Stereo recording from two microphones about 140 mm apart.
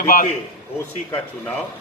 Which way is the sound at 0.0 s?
80° left.